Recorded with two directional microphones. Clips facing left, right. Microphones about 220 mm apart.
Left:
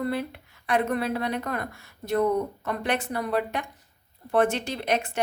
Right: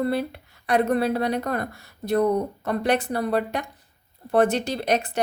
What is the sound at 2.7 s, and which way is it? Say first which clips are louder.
Speech: right 5 dB; 35° right (ahead or behind).